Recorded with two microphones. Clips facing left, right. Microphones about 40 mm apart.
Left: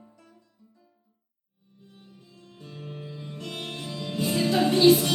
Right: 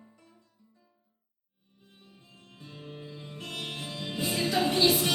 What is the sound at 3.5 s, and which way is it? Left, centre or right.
Music, centre.